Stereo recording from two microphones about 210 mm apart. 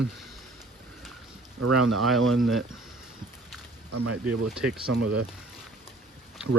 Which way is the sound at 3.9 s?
90° right.